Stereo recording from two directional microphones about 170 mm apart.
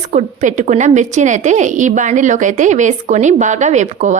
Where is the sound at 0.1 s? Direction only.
45° right (ahead or behind).